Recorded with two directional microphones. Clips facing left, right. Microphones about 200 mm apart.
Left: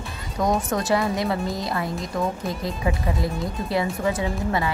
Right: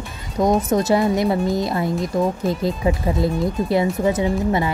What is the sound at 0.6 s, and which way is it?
Speech, 20° right (ahead or behind).